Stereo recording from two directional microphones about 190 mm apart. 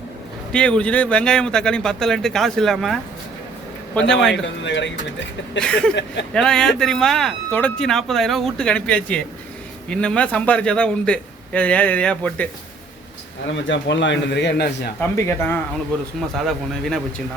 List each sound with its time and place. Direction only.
0.5 s a man's voice: 5° left (ahead or behind)
4.1 s a man's voice: centre (ahead or behind)
4.4 s a man's voice: 75° left (ahead or behind)
5.5 s a man's voice: 5° left (ahead or behind)
5.9 s speech: 65° left (ahead or behind)
6.3 s a man's voice: 5° left (ahead or behind)
13.7 s a man's voice: 70° left (ahead or behind)
15.1 s a man's voice: 10° left (ahead or behind)